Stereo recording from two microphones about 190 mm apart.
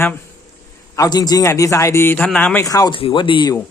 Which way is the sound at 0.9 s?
20° left (ahead or behind).